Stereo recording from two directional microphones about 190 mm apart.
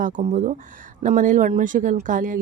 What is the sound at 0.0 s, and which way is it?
Speech, 40° right (ahead or behind).